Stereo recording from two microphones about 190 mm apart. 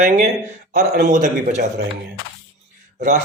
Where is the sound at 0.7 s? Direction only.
40° right (ahead or behind).